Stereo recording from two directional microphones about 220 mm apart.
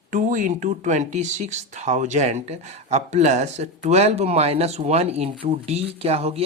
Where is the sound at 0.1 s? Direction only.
35° right (ahead or behind).